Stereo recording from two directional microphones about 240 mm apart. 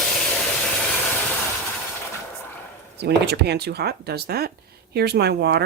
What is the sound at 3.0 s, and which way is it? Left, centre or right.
Speech, right.